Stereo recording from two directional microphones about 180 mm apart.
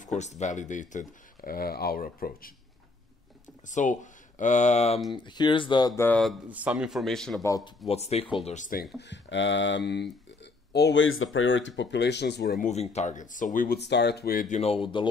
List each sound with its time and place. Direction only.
0.0 s speech: 40° left (ahead or behind)
3.6 s speech: 45° left (ahead or behind)
5.1 s speech: 25° left (ahead or behind); by 6.3 s 10° left (ahead or behind)
6.5 s speech: 5° right (ahead or behind)
7.4 s speech: 20° left (ahead or behind)
7.9 s speech: 35° left (ahead or behind)
9.0 s speech: 85° left; by 12.5 s 70° left (ahead or behind)
12.5 s speech: 40° left (ahead or behind)
13.7 s speech: 70° left (ahead or behind); by 14.6 s 50° left (ahead or behind)
14.6 s speech: 30° left (ahead or behind)